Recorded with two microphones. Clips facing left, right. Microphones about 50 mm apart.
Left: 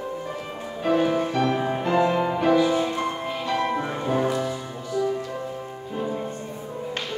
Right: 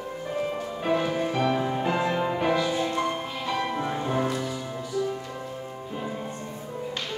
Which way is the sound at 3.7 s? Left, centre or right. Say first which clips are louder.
Left 2 dB; centre.